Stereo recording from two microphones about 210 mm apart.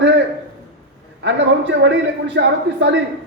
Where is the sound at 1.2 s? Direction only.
55° right (ahead or behind).